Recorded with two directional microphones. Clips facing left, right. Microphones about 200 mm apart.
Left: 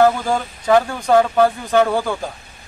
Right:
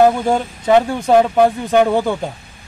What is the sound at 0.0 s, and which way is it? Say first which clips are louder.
Speech: right 2 dB; 25° right (ahead or behind).